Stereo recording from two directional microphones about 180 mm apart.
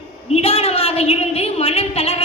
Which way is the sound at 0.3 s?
35° left (ahead or behind).